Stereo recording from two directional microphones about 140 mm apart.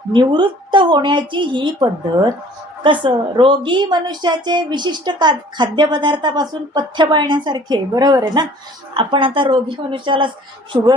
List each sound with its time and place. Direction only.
0.1 s a woman's voice: 35° right (ahead or behind)